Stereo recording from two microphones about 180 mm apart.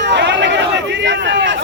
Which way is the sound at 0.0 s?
75° right (ahead or behind).